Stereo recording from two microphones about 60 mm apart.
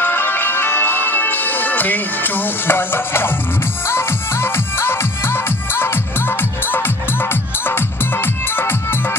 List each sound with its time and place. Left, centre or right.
0.0 s music: left